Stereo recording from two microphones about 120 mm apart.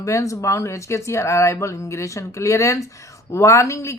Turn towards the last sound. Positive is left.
turn(degrees=25)  # may be behind; listen again after turning